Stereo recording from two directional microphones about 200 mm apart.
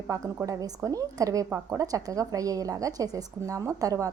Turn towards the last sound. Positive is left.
turn(degrees=-15)  # may be behind; listen again after turning